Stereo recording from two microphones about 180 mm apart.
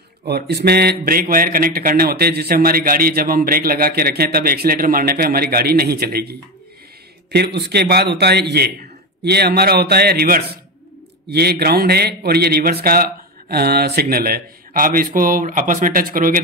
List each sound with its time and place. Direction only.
0.3 s a man's voice: 65° right (ahead or behind)